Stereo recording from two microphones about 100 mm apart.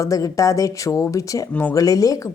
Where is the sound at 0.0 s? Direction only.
35° left (ahead or behind).